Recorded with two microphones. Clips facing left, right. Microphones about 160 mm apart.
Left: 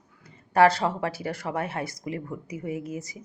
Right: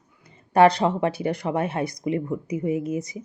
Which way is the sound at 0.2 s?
20° right (ahead or behind).